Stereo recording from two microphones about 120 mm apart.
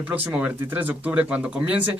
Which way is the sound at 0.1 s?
15° right (ahead or behind).